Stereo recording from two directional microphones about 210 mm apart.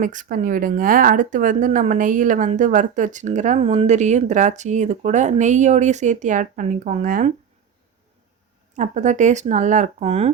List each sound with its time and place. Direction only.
0.0 s a woman's voice: 40° right (ahead or behind)
8.7 s a woman's voice: 35° right (ahead or behind)